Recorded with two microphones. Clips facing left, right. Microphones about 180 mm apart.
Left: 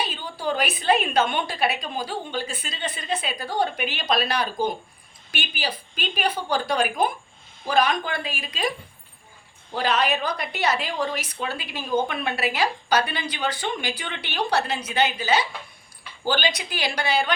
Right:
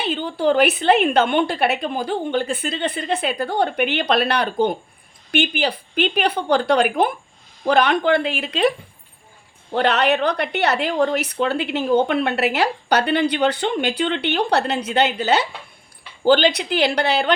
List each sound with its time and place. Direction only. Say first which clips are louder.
0.0 s a woman's voice: right 8 dB; 60° right (ahead or behind)
9.7 s a woman's voice: right 5 dB; 65° right (ahead or behind)